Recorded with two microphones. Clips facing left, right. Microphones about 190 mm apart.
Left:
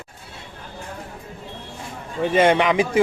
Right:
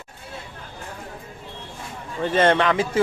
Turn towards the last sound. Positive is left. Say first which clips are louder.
# left 2 dB
turn(degrees=15)  # may be behind; listen again after turning